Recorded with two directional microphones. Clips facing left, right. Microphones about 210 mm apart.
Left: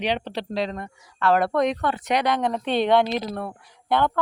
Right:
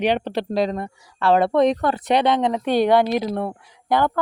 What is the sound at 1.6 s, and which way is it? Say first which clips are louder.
Speech: right 5 dB; 35° right (ahead or behind).